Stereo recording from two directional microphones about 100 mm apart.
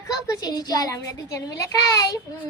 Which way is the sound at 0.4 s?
40° left (ahead or behind).